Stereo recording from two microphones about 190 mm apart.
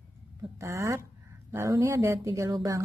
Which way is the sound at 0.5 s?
15° right (ahead or behind).